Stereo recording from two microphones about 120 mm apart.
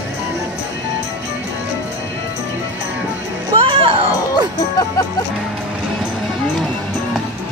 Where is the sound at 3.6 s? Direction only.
55° right (ahead or behind).